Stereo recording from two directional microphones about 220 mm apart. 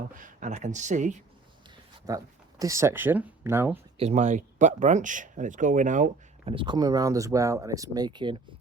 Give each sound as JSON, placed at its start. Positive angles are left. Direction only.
{"t": 0.2, "sound": "speech", "side_deg": -35}
{"t": 2.0, "sound": "speech", "side_deg": -15}
{"t": 3.9, "sound": "speech", "side_deg": -30}